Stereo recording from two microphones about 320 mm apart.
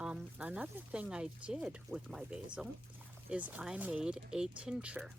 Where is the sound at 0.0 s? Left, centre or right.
Centre.